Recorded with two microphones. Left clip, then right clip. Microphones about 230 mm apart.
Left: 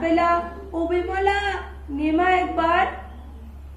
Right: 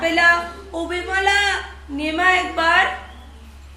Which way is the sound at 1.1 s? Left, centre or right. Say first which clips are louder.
Right 9 dB; right.